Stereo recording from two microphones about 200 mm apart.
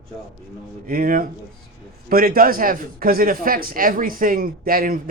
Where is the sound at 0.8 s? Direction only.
45° right (ahead or behind).